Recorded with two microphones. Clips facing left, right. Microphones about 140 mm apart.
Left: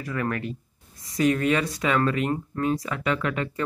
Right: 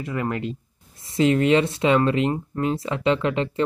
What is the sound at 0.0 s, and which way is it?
Speech, 20° right (ahead or behind).